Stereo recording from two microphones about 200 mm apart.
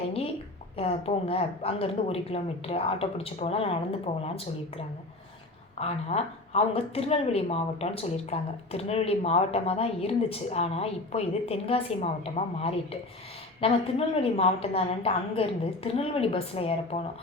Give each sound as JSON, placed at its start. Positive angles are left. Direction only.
{"t": 0.8, "sound": "speech", "side_deg": 30}
{"t": 5.8, "sound": "speech", "side_deg": 30}